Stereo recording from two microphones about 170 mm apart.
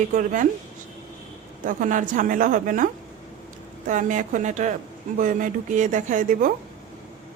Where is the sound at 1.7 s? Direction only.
50° right (ahead or behind).